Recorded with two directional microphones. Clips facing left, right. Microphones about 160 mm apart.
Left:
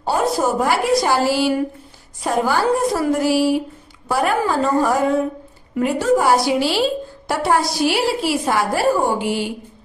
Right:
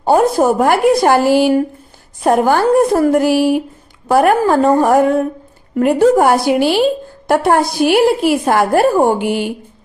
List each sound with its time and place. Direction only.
0.0 s a woman's voice: 55° right (ahead or behind)